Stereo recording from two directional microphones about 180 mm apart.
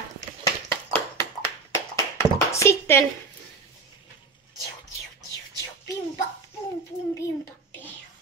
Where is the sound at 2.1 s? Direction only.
15° left (ahead or behind).